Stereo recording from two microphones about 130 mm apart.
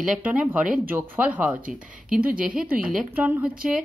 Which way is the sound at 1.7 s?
90° right.